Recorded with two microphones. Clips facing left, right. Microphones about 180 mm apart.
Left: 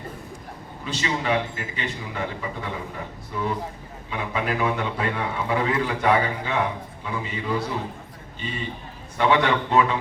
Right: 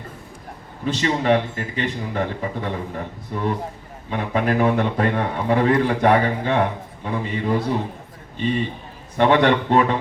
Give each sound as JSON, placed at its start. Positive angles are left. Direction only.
{"t": 0.9, "sound": "a man's voice", "side_deg": -45}
{"t": 9.1, "sound": "a man's voice", "side_deg": -45}